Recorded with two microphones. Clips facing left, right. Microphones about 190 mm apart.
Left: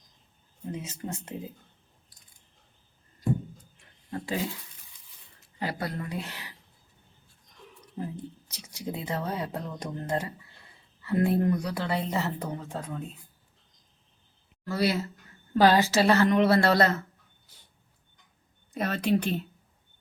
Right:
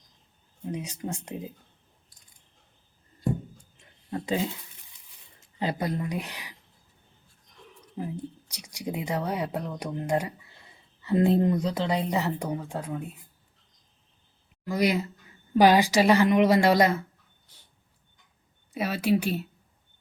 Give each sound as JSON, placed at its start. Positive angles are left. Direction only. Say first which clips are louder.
{"t": 0.7, "sound": "a woman's voice", "louder": "right 2 dB", "side_deg": -15}
{"t": 3.8, "sound": "a sound", "louder": "right 3 dB", "side_deg": -25}
{"t": 5.5, "sound": "a woman's voice", "louder": "right 4 dB", "side_deg": -20}
{"t": 7.9, "sound": "a woman's voice", "louder": "right 2 dB", "side_deg": -15}
{"t": 14.6, "sound": "a woman's voice", "louder": "right 2 dB", "side_deg": -15}
{"t": 18.7, "sound": "a woman's voice", "louder": "right 1 dB", "side_deg": -10}